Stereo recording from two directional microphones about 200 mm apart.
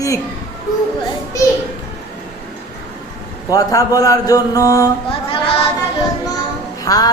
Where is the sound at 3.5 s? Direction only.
15° left (ahead or behind).